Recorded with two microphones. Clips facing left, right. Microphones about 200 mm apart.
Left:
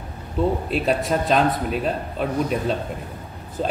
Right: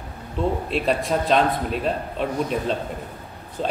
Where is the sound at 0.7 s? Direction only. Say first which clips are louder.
Left 1 dB; centre (ahead or behind).